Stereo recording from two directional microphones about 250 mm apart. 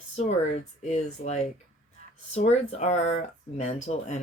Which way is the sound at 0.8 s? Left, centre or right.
Left.